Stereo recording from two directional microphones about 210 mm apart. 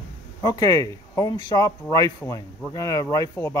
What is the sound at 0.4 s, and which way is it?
Speech, 15° left (ahead or behind).